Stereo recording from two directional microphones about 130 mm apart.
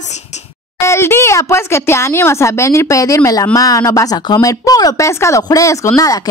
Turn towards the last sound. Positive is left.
turn(degrees=25)  # may be behind; listen again after turning